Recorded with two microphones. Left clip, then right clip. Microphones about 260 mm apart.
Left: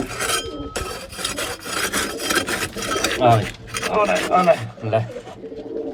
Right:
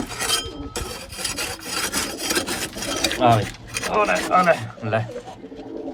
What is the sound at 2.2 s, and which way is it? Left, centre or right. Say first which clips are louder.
Filing: left 3 dB; centre.